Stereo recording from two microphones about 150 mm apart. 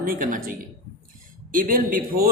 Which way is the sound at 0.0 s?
70° right (ahead or behind).